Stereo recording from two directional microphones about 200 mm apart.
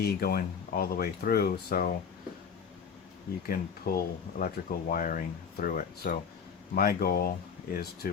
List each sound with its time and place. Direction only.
0.0 s speech: 50° left (ahead or behind)
3.4 s speech: 50° left (ahead or behind)